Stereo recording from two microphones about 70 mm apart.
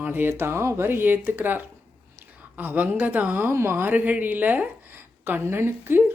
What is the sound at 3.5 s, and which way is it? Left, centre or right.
Speech, right.